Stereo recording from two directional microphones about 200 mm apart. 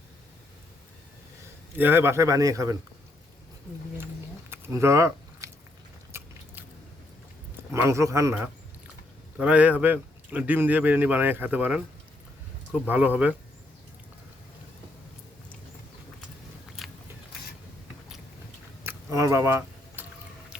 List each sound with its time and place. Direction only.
1.7 s a man's voice: 10° right (ahead or behind)
4.5 s a sound: 15° right (ahead or behind)
6.1 s biting: 10° right (ahead or behind)
7.7 s a man's voice: 15° right (ahead or behind)
12.9 s a man's voice: 5° right (ahead or behind)
18.8 s a sound: 15° right (ahead or behind)